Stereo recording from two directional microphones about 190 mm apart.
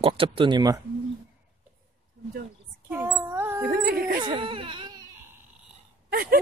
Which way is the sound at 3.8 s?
50° right (ahead or behind).